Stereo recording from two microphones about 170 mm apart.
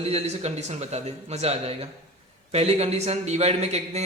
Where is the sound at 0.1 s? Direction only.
40° right (ahead or behind).